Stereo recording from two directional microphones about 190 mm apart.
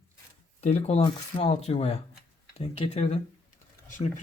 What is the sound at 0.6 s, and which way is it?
Speech, 35° left (ahead or behind).